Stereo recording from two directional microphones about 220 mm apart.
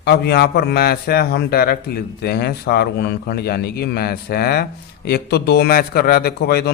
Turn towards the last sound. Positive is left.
turn(degrees=45)  # may be behind; listen again after turning